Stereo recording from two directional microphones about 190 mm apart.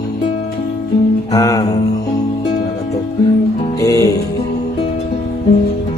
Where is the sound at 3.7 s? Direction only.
15° left (ahead or behind).